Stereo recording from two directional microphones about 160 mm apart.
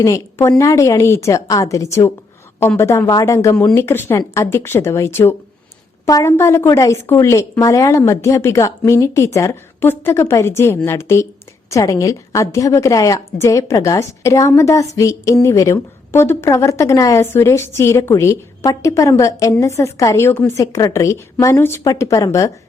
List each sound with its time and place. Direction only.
0.0 s a woman's voice: 15° left (ahead or behind)